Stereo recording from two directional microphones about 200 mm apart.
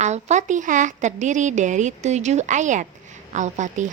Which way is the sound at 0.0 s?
35° right (ahead or behind).